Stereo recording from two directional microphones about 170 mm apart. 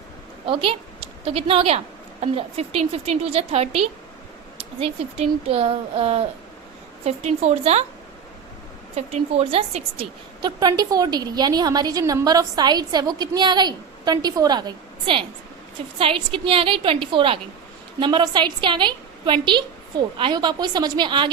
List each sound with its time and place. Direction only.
0.4 s a woman's voice: 30° right (ahead or behind)
9.0 s a woman's voice: 40° right (ahead or behind)